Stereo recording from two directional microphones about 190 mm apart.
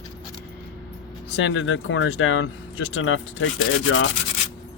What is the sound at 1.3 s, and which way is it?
Speech, 90° left.